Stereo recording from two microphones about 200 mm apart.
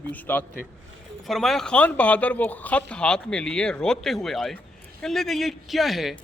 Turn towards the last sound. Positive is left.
turn(degrees=0)  # may be behind; listen again after turning